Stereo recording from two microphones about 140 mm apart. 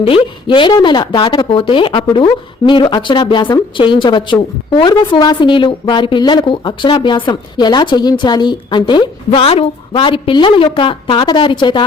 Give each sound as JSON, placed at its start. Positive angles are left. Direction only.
{"t": 0.0, "sound": "speech", "side_deg": 40}